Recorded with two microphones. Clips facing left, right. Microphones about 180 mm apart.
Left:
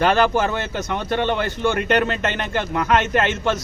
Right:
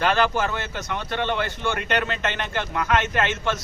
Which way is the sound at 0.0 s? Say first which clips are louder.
Left 4 dB; 35° left (ahead or behind).